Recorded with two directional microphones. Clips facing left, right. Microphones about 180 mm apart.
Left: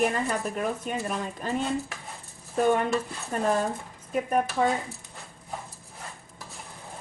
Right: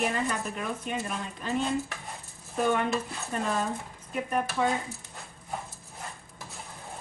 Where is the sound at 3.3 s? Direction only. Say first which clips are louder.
Left 4 dB; 45° left (ahead or behind).